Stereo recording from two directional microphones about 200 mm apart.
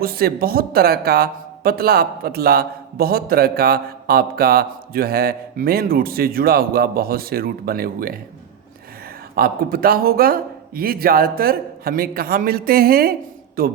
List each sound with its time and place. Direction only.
0.0 s a man's voice: 50° right (ahead or behind)
9.3 s a man's voice: 50° right (ahead or behind)